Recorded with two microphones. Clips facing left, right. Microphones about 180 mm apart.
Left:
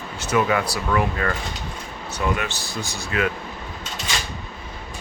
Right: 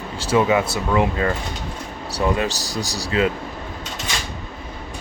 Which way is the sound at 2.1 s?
35° right (ahead or behind).